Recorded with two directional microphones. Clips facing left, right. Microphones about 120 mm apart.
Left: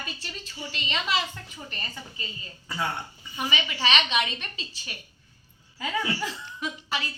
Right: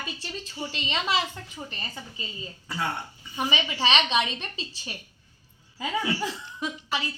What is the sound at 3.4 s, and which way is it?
A woman's voice, 25° right (ahead or behind).